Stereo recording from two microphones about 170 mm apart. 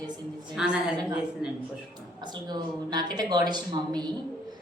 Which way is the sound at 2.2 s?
25° right (ahead or behind).